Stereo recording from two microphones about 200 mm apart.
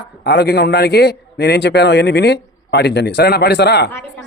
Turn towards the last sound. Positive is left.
turn(degrees=55)  # may be behind; listen again after turning